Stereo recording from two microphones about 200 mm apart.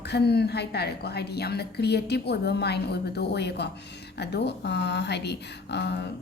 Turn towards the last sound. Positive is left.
turn(degrees=55)  # may be behind; listen again after turning